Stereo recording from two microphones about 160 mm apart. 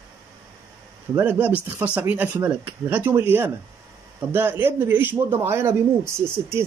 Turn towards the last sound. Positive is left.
turn(degrees=-15)  # may be behind; listen again after turning